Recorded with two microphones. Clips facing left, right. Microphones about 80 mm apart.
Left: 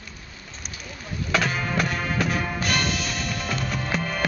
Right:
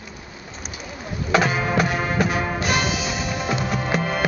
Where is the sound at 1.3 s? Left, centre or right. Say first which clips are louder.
Right 5 dB; centre.